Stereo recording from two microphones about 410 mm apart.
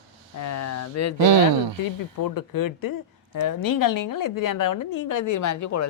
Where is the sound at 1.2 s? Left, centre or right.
Right.